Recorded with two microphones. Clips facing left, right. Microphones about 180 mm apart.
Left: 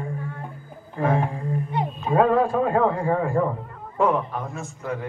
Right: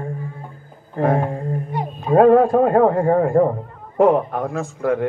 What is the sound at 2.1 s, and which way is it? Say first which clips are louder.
A man's voice: right 7 dB; 50° right (ahead or behind).